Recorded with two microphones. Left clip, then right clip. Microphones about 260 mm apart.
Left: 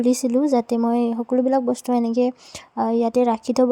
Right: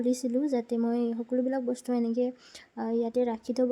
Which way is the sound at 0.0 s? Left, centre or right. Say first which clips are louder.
Left 9 dB; left.